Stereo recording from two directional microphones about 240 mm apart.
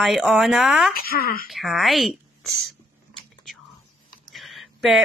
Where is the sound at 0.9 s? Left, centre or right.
Left.